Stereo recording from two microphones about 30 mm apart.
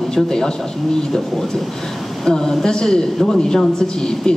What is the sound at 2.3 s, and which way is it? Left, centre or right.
Speech, centre.